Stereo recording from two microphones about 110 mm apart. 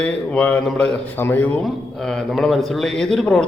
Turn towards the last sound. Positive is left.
turn(degrees=5)  # may be behind; listen again after turning